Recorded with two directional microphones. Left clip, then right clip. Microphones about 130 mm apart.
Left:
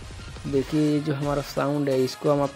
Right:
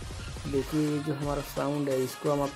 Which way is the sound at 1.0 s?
25° left (ahead or behind).